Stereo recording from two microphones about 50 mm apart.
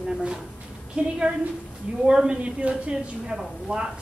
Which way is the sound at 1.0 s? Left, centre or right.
Right.